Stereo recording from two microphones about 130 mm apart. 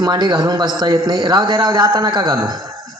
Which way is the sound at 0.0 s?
35° right (ahead or behind).